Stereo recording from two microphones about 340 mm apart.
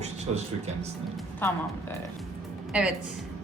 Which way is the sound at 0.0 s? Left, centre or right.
Centre.